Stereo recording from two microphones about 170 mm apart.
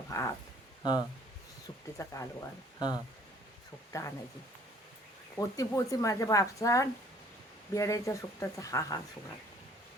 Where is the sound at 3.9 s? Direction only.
20° left (ahead or behind).